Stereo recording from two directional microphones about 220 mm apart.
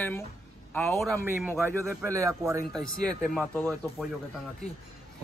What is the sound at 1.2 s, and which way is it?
A man's voice, 10° right (ahead or behind).